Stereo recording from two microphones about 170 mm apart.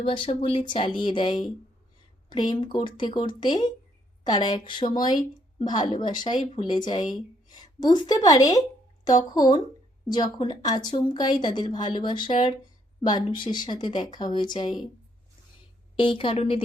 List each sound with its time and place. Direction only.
0.0 s a woman's voice: 30° left (ahead or behind)
16.0 s speech: 30° left (ahead or behind)